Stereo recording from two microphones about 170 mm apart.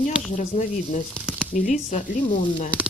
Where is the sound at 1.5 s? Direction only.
45° left (ahead or behind).